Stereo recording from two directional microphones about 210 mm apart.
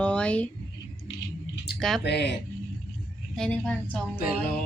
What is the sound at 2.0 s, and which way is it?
Speech, 55° left (ahead or behind).